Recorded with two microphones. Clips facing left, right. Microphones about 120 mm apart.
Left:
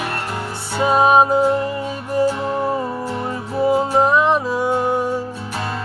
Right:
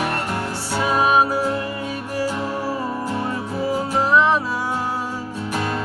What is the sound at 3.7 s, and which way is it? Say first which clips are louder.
Music: left 4 dB; 20° left (ahead or behind).